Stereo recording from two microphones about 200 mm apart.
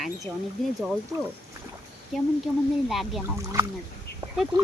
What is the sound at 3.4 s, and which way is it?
Speech, 15° right (ahead or behind).